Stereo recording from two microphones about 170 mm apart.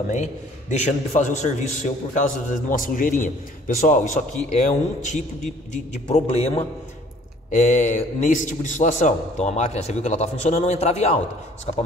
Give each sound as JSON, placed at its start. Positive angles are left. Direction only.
{"t": 0.1, "sound": "a man's voice", "side_deg": 45}